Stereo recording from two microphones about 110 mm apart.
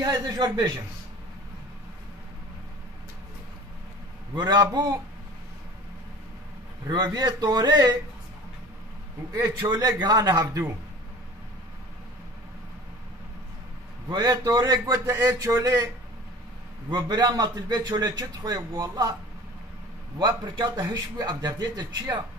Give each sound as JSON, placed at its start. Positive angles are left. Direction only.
{"t": 0.0, "sound": "a man's voice", "side_deg": -35}
{"t": 4.4, "sound": "a man's voice", "side_deg": -45}
{"t": 7.2, "sound": "a man's voice", "side_deg": -40}
{"t": 9.3, "sound": "a man's voice", "side_deg": -35}
{"t": 14.0, "sound": "a man's voice", "side_deg": -40}
{"t": 16.9, "sound": "a man's voice", "side_deg": -40}
{"t": 20.2, "sound": "a man's voice", "side_deg": -40}